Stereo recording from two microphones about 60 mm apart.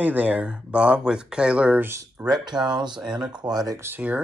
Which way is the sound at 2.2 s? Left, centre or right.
Right.